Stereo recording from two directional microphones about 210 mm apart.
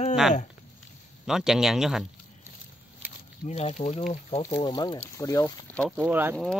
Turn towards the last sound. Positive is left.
turn(degrees=0)  # may be behind; listen again after turning